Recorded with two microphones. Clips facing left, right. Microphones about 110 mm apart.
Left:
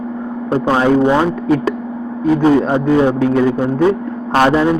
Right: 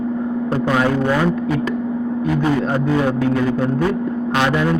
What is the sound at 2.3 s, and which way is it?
A man's voice, 30° left (ahead or behind).